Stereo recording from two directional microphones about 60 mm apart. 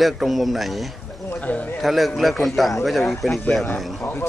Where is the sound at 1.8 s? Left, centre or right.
Centre.